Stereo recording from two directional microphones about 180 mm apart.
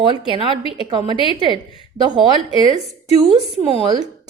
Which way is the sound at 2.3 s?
30° left (ahead or behind).